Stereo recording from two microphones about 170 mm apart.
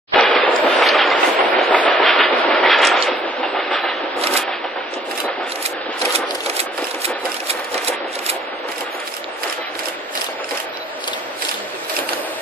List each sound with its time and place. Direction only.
0.1 s train: 5° left (ahead or behind)
4.2 s shuffling cards: 35° right (ahead or behind)
6.1 s chopping: 35° right (ahead or behind)